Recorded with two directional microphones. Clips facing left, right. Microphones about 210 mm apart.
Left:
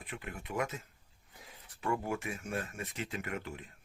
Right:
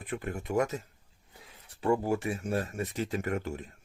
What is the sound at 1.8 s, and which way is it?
Speech, 30° right (ahead or behind).